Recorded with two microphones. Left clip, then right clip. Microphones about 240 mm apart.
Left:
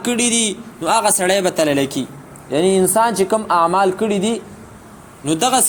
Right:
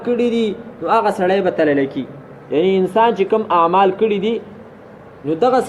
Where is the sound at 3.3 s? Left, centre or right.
Left.